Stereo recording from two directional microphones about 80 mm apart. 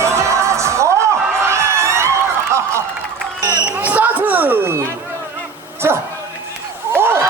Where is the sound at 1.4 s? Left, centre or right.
Right.